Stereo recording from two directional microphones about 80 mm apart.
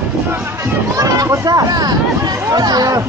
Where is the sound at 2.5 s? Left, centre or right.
Right.